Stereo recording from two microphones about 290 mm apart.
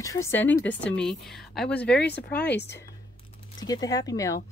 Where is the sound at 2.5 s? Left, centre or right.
Left.